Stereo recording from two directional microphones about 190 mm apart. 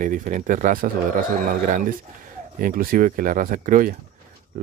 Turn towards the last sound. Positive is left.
turn(degrees=-45)  # may be behind; listen again after turning